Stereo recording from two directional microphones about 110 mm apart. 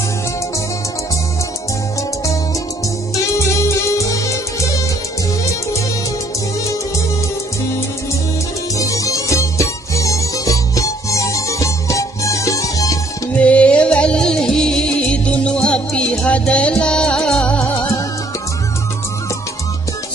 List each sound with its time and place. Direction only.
3.6 s music: 30° left (ahead or behind)
8.7 s music: 30° left (ahead or behind)
13.3 s music: 10° left (ahead or behind)